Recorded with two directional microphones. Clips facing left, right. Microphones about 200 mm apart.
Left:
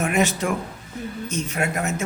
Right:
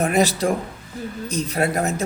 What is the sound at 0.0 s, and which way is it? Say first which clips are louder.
A woman's voice: right 3 dB; 35° right (ahead or behind).